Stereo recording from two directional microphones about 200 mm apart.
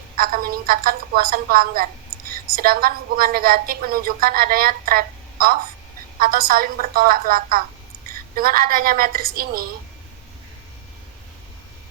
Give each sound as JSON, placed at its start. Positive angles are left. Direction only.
{"t": 0.2, "sound": "a woman's voice", "side_deg": -45}